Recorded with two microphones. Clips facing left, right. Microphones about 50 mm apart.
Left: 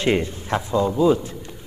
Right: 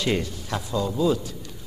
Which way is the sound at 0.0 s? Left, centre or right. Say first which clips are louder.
Left 5 dB; left.